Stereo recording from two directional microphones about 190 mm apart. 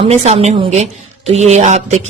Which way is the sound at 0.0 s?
30° right (ahead or behind).